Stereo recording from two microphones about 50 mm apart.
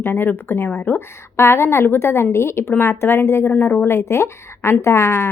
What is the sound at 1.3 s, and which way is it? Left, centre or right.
A woman's voice, left.